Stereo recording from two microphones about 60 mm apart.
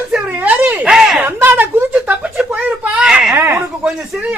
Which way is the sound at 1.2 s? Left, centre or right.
Right.